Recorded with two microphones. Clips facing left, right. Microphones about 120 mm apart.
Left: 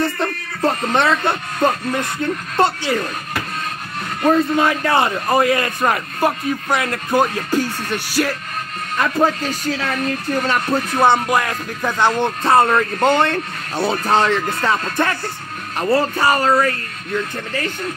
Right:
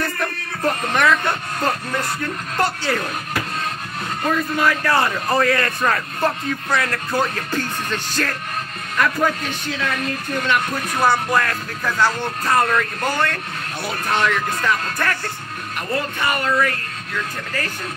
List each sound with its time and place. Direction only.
0.0 s speech: 25° left (ahead or behind)
4.3 s speech: 25° left (ahead or behind)
8.9 s speech: 25° left (ahead or behind)
11.0 s speech: 20° left (ahead or behind); by 16.7 s 35° left (ahead or behind)